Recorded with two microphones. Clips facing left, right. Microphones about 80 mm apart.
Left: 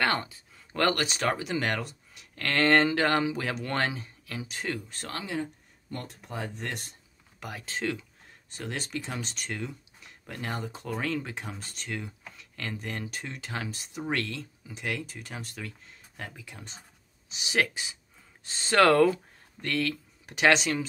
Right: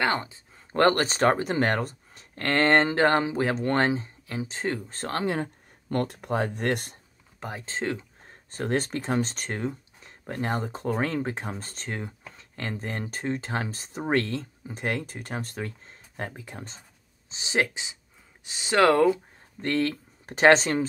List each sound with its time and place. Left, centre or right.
0.0 s speech: right
0.7 s speech: right
7.3 s speech: right
17.3 s speech: right
19.6 s speech: right